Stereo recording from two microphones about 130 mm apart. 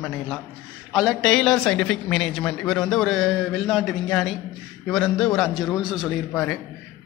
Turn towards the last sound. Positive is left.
turn(degrees=0)  # may be behind; listen again after turning